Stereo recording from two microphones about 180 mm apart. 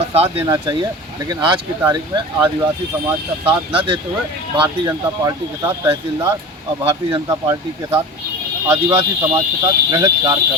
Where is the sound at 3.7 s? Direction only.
30° right (ahead or behind).